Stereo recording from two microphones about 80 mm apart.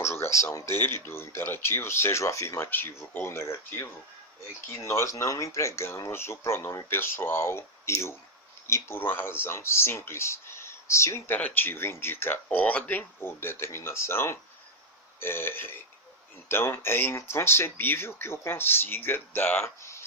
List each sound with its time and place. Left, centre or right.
0.0 s a sound: left
0.8 s speech: left
3.3 s speech: left
11.3 s speech: left
12.5 s speech: centre
19.6 s a sound: left